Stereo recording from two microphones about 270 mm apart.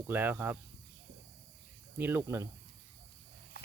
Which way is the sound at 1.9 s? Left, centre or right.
Centre.